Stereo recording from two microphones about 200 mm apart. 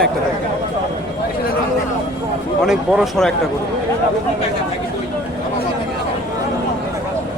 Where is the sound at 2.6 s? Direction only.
Centre (ahead or behind).